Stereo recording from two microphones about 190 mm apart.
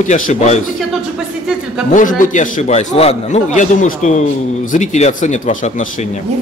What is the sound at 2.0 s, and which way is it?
A man's voice, 45° left (ahead or behind).